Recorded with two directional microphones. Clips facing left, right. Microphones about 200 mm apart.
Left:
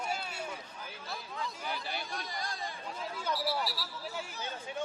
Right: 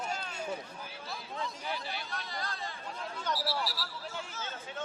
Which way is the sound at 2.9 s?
Centre (ahead or behind).